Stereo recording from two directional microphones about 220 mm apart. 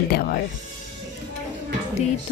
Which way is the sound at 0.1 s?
40° left (ahead or behind).